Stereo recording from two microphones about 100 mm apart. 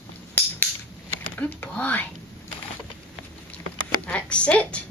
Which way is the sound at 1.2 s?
15° left (ahead or behind).